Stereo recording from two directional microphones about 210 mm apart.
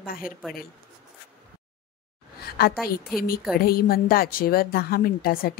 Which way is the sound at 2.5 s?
50° left (ahead or behind).